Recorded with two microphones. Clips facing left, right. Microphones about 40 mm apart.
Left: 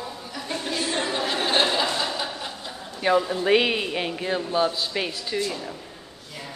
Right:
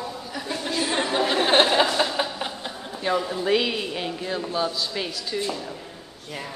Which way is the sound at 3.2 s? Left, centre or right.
Centre.